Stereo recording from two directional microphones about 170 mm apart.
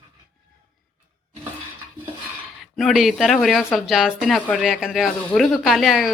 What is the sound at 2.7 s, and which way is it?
Speech, centre (ahead or behind).